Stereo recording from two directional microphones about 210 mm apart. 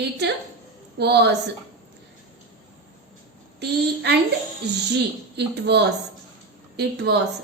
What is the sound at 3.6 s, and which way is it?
Speech, 55° right (ahead or behind).